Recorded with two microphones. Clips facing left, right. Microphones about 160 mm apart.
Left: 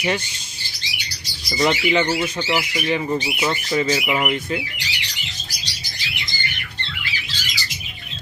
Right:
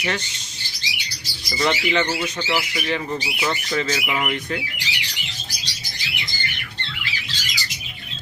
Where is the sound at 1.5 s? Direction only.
20° left (ahead or behind).